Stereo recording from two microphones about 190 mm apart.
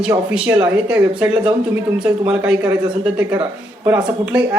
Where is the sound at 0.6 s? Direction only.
5° right (ahead or behind).